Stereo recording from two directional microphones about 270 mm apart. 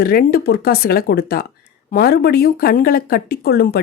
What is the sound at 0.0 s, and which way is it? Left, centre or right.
Speech, left.